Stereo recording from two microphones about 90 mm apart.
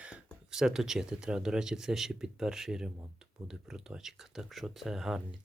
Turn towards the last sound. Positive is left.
turn(degrees=-5)  # may be behind; listen again after turning